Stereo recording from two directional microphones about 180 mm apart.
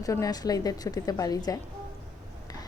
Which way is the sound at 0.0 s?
20° left (ahead or behind).